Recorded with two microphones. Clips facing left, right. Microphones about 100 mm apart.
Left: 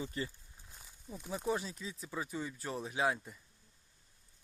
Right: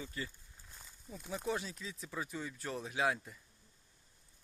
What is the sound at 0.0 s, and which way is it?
Speech, 25° left (ahead or behind).